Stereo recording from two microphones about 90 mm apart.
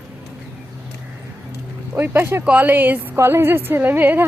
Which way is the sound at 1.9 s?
25° right (ahead or behind).